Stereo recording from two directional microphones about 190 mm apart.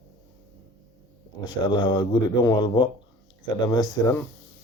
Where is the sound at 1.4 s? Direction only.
20° left (ahead or behind).